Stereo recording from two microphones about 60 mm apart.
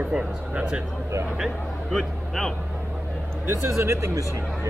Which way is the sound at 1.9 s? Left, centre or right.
Centre.